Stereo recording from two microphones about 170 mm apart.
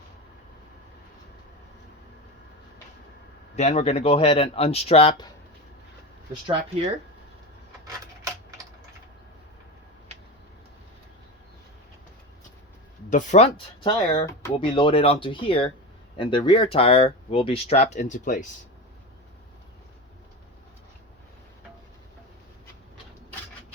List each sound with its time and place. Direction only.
3.5 s speech: 40° left (ahead or behind)
13.1 s speech: 45° left (ahead or behind)
13.8 s speech: 30° left (ahead or behind); by 18.4 s 50° left (ahead or behind)